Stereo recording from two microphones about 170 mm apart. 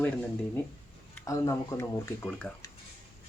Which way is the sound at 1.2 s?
20° left (ahead or behind).